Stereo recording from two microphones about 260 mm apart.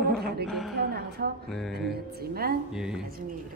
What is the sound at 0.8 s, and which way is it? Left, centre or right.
A woman's voice, right.